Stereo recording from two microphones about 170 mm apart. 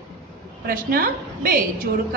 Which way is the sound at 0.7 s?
60° right (ahead or behind).